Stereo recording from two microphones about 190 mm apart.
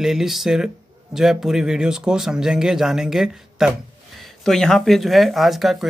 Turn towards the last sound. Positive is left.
turn(degrees=0)  # may be behind; listen again after turning